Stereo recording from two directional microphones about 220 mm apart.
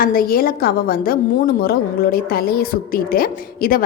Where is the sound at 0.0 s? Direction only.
40° left (ahead or behind).